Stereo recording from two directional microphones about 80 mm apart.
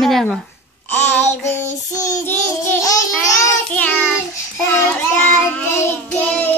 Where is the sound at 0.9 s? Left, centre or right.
Left.